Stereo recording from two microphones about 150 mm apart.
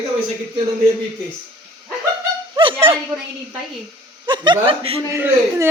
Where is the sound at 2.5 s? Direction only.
35° right (ahead or behind).